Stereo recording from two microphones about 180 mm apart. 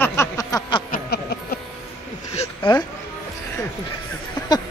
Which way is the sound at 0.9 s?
60° left (ahead or behind).